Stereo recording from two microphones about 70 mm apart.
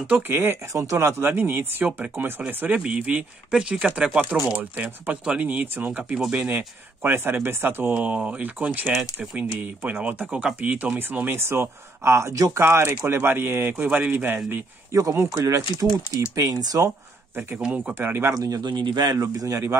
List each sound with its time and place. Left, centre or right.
0.3 s speech: right
7.0 s speech: right
14.9 s speech: right
16.3 s speech: right
17.6 s speech: centre
17.9 s speech: right
18.3 s a man's voice: right
19.1 s speech: right